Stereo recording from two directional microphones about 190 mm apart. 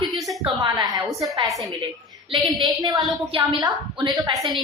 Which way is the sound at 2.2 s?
25° right (ahead or behind).